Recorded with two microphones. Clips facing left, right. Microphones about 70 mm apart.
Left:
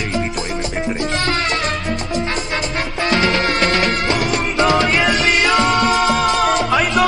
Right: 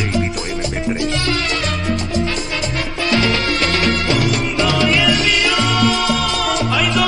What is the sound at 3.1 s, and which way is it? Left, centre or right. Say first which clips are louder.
Music: left 1 dB; left.